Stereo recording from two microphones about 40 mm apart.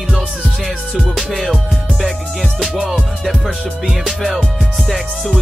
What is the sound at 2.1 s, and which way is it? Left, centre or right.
Music, centre.